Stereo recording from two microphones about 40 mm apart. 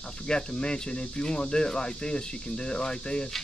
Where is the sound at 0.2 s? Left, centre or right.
Left.